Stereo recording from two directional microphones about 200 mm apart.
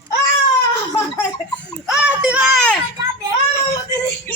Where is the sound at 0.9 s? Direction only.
15° left (ahead or behind).